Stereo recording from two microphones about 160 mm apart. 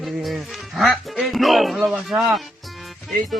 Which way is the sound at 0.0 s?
Centre (ahead or behind).